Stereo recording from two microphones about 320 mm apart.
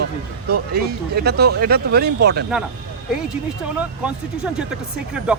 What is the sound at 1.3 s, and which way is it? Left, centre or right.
Speech, right.